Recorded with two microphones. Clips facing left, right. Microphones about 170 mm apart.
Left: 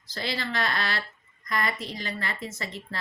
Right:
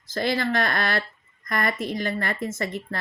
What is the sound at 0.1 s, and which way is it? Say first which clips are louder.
A woman's voice: right 8 dB; 50° right (ahead or behind).